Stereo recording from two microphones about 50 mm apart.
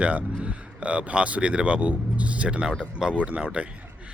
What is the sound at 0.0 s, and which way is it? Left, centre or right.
Speech, right.